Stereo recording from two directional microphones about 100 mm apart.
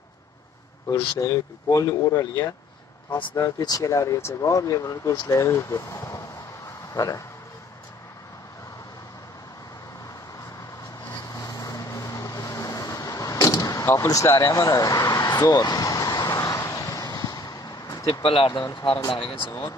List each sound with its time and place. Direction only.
1.2 s speech: 35° left (ahead or behind)
11.1 s vehicle: 40° left (ahead or behind)
16.3 s vehicle: 30° left (ahead or behind)
18.2 s speech: 70° left (ahead or behind)
18.5 s speech: 45° left (ahead or behind)
19.0 s speech: 65° left (ahead or behind)